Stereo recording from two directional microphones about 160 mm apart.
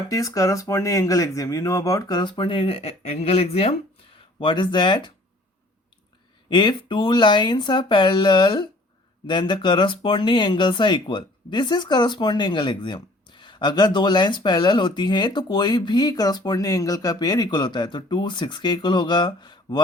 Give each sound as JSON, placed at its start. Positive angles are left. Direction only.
{"t": 0.1, "sound": "speech", "side_deg": 20}
{"t": 6.5, "sound": "speech", "side_deg": 30}